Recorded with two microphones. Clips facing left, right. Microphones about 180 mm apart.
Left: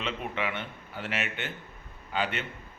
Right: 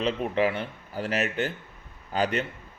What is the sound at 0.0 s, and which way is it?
A man's voice, 40° right (ahead or behind).